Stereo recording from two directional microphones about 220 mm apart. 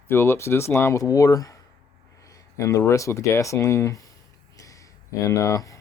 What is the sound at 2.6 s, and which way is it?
Speech, 15° left (ahead or behind).